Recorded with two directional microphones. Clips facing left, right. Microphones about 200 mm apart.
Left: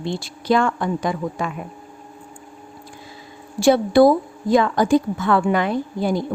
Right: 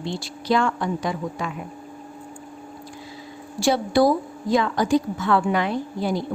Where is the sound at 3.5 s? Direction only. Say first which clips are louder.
Left 5 dB; 55° left (ahead or behind).